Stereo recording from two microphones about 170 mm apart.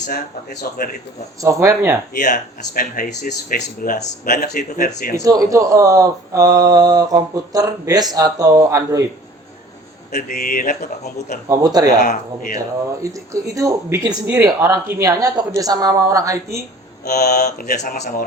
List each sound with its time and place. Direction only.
0.6 s speech: 55° left (ahead or behind)
1.4 s speech: 15° right (ahead or behind)
2.1 s speech: 50° left (ahead or behind)
5.2 s speech: 20° right (ahead or behind)
10.1 s speech: 60° left (ahead or behind)
11.4 s speech: 20° right (ahead or behind)
11.9 s speech: 50° left (ahead or behind)
12.5 s speech: 20° right (ahead or behind)
17.0 s mantra: 70° left (ahead or behind)
17.4 s speech: 65° left (ahead or behind)
17.7 s speech: 45° left (ahead or behind)